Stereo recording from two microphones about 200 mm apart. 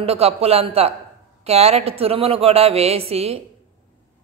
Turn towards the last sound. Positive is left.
turn(degrees=-30)  # may be behind; listen again after turning